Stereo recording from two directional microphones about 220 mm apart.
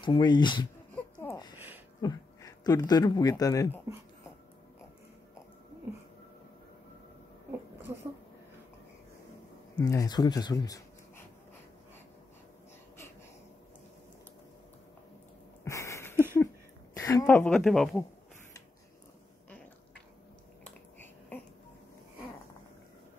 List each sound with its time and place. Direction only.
0.0 s speech: 20° left (ahead or behind)
0.9 s a sound: 10° left (ahead or behind)
2.0 s speech: 15° left (ahead or behind)
9.8 s speech: 15° left (ahead or behind)
15.6 s a sound: 15° left (ahead or behind)
16.9 s a woman's voice: 15° left (ahead or behind)
20.6 s finger snapping: 10° left (ahead or behind)